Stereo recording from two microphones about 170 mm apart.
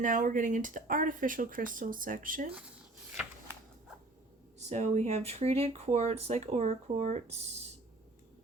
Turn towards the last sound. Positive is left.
turn(degrees=-40)  # may be behind; listen again after turning